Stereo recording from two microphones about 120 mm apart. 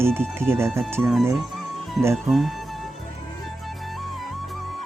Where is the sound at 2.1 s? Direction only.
Centre (ahead or behind).